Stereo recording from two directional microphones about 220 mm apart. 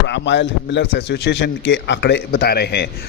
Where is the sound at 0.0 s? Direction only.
55° left (ahead or behind).